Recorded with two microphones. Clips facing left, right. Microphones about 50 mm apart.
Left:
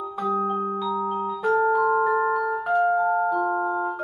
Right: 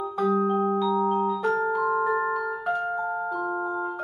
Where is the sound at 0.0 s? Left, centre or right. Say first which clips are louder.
Right 1 dB; centre.